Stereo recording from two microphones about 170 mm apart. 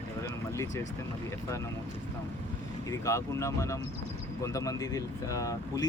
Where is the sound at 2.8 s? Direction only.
15° left (ahead or behind).